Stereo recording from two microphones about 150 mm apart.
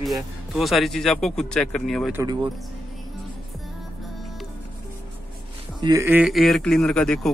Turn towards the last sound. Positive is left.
turn(degrees=5)  # may be behind; listen again after turning